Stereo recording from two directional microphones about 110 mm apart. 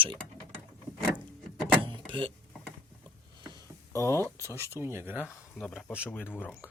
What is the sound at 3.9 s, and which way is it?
Speech, 25° left (ahead or behind).